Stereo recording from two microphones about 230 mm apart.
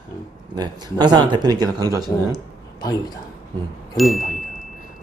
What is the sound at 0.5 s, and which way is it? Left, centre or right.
Speech, centre.